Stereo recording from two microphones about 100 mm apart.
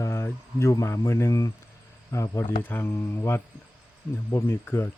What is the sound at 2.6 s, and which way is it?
Speech, 20° left (ahead or behind).